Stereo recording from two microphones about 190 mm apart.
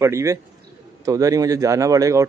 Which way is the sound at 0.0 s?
15° right (ahead or behind).